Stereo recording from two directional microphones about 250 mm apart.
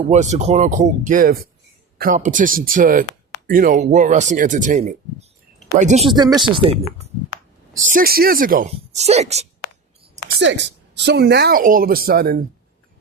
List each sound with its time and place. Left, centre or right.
0.0 s speech: right
7.9 s speech: right
10.2 s speech: right